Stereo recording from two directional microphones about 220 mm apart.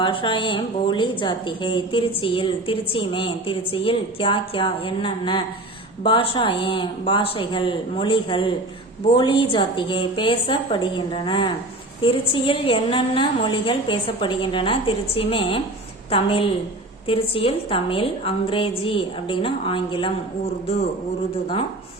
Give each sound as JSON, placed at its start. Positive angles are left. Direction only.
{"t": 0.0, "sound": "a woman's voice", "side_deg": 20}